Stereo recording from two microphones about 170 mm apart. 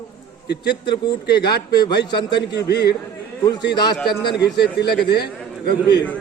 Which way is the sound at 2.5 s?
85° left.